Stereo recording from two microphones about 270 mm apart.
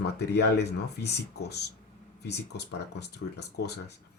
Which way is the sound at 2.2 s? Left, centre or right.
Left.